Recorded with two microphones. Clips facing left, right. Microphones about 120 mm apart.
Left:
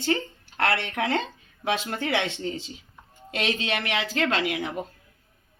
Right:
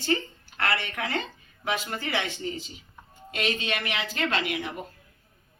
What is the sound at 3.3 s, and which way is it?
Speech, 90° left.